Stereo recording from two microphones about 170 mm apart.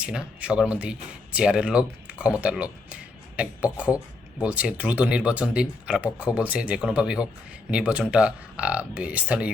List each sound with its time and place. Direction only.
0.0 s speech: 5° right (ahead or behind)